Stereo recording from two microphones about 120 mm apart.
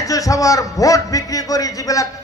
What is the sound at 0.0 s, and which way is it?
A man's voice, 30° left (ahead or behind).